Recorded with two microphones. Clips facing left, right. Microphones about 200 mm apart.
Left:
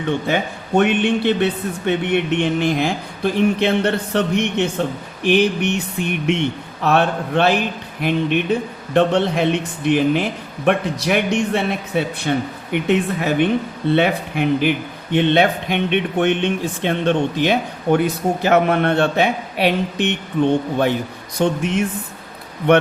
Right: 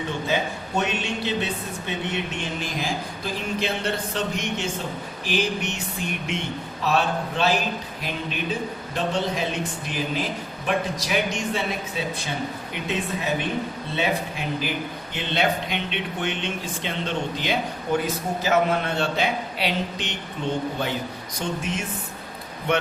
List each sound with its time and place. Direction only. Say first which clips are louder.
0.8 s a man's voice: left 11 dB; 60° left (ahead or behind)